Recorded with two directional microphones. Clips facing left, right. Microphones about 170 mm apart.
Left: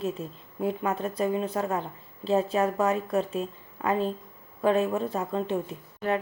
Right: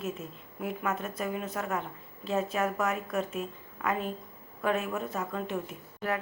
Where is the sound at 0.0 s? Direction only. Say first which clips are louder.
Left 5 dB; 30° left (ahead or behind).